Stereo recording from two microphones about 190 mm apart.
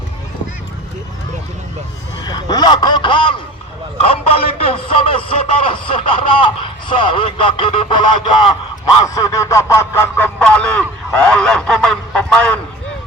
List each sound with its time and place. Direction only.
2.2 s a man's voice: 20° left (ahead or behind); by 12.5 s 5° left (ahead or behind)